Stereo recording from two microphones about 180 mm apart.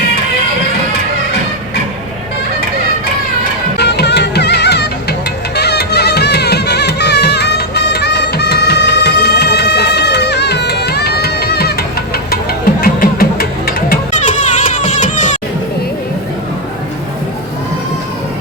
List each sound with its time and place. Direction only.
3.8 s music: 70° left (ahead or behind); by 15.4 s 45° left (ahead or behind)